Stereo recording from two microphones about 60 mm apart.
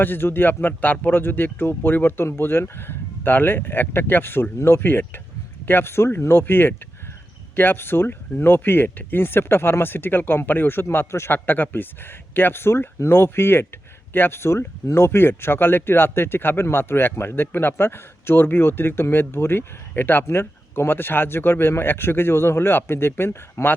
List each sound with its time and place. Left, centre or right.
0.0 s a man's voice: left